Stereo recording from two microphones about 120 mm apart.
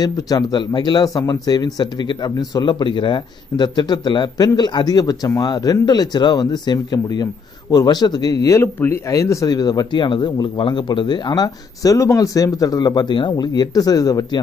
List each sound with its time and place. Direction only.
0.0 s speech: 35° left (ahead or behind)